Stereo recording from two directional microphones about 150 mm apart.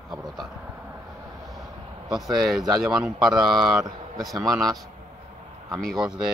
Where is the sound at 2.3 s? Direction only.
Centre (ahead or behind).